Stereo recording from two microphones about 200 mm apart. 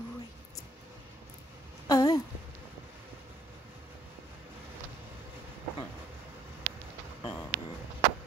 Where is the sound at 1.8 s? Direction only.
20° left (ahead or behind).